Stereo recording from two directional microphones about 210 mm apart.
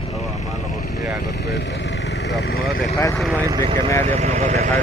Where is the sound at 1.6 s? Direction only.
55° left (ahead or behind).